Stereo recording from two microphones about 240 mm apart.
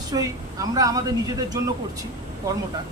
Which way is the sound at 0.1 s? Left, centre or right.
Centre.